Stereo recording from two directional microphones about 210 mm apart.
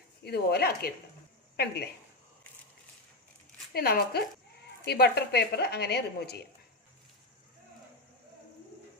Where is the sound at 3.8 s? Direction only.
45° left (ahead or behind).